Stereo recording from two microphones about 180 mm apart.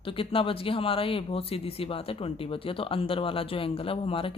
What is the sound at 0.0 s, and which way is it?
Speech, 30° left (ahead or behind).